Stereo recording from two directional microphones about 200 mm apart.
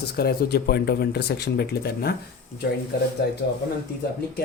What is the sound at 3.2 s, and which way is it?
Speech, 55° left (ahead or behind).